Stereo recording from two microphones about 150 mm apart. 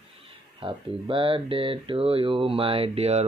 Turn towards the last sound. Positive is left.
turn(degrees=-45)  # may be behind; listen again after turning